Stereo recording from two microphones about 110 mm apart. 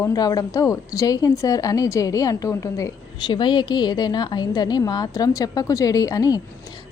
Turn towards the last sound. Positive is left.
turn(degrees=35)  # may be behind; listen again after turning